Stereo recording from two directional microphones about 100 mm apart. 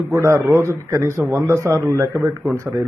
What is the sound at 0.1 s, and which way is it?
A man's voice, 25° right (ahead or behind).